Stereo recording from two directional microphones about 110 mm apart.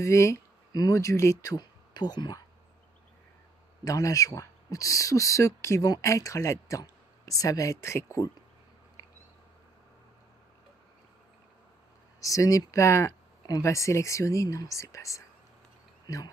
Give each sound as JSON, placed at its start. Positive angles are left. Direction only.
{"t": 0.0, "sound": "speech", "side_deg": 25}
{"t": 3.8, "sound": "speech", "side_deg": 30}
{"t": 9.0, "sound": "cat", "side_deg": 30}
{"t": 12.2, "sound": "speech", "side_deg": 30}